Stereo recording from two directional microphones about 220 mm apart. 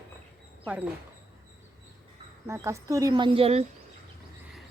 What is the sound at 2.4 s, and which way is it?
Speech, 15° right (ahead or behind).